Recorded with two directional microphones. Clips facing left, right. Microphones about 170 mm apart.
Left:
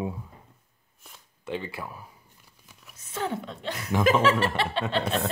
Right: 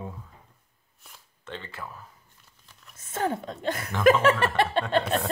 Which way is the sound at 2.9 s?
50° right (ahead or behind).